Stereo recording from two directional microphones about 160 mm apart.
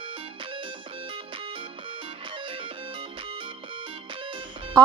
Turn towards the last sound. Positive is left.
turn(degrees=-30)  # may be behind; listen again after turning